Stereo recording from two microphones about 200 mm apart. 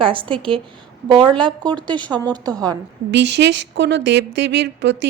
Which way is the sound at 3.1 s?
60° right (ahead or behind).